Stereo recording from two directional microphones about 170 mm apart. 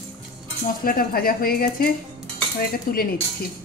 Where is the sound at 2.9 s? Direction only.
60° left (ahead or behind).